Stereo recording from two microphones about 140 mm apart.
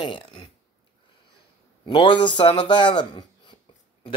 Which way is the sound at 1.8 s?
35° left (ahead or behind).